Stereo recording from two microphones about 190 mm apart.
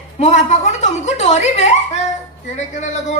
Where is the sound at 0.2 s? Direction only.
35° left (ahead or behind).